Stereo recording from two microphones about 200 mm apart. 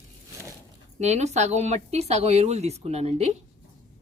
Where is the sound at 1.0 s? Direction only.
35° right (ahead or behind).